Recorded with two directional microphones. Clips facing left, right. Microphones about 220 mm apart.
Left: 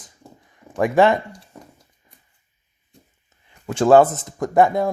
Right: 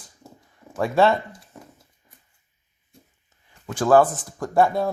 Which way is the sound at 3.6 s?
25° left (ahead or behind).